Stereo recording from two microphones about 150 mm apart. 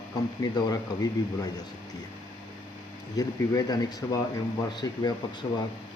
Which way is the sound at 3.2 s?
25° left (ahead or behind).